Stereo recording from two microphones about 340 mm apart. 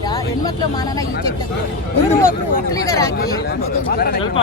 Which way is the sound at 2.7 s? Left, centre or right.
Centre.